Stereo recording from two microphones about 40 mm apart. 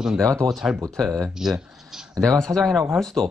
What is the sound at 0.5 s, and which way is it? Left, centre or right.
Speech, centre.